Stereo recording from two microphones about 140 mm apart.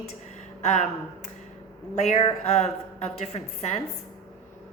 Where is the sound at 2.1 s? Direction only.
45° left (ahead or behind).